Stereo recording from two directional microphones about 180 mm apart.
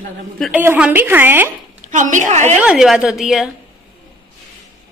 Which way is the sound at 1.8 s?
45° right (ahead or behind).